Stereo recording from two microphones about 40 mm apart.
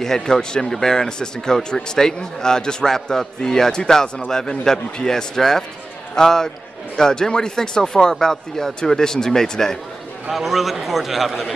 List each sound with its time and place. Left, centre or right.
0.2 s speech: centre
10.3 s a man's voice: centre